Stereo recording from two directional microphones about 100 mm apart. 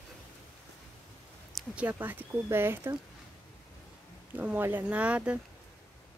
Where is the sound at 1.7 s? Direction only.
15° right (ahead or behind).